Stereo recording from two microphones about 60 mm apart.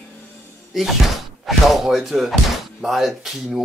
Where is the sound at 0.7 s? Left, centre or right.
Centre.